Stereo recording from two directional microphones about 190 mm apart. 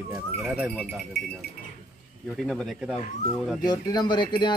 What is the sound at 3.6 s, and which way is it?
Speech, 20° left (ahead or behind).